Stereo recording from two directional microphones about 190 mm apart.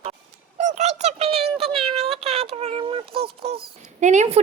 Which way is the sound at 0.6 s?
40° right (ahead or behind).